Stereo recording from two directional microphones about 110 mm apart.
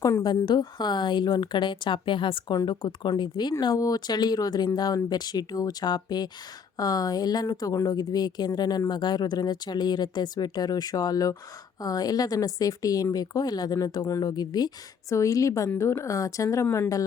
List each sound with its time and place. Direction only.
0.0 s speech: 30° left (ahead or behind)
0.6 s a woman's voice: 40° left (ahead or behind)
16.6 s speech: 20° left (ahead or behind)